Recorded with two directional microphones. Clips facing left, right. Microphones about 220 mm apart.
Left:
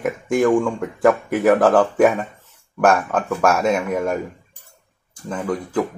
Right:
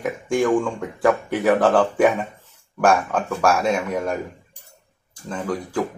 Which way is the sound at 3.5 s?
5° left (ahead or behind).